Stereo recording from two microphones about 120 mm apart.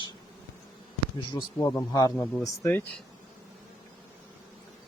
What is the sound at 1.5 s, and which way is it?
Speech, 25° left (ahead or behind).